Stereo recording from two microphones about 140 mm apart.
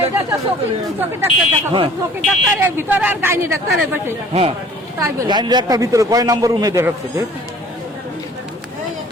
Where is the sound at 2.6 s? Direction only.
15° right (ahead or behind).